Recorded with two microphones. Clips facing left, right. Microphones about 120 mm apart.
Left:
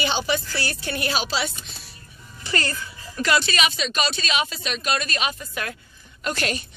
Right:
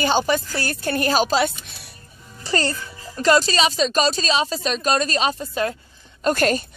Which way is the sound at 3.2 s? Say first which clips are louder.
Right 5 dB; 35° right (ahead or behind).